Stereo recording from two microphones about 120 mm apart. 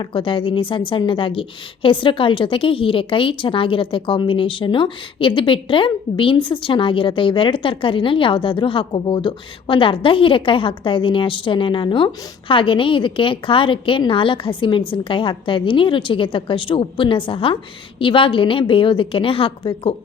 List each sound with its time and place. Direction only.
0.0 s a woman's voice: 45° left (ahead or behind)